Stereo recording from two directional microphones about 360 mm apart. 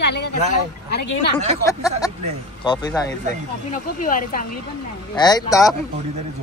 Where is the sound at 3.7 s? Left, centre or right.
Left.